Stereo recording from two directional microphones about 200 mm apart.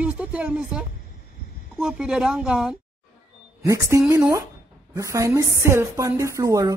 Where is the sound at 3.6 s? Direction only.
15° right (ahead or behind).